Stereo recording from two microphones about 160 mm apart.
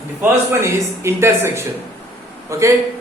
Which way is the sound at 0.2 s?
15° right (ahead or behind).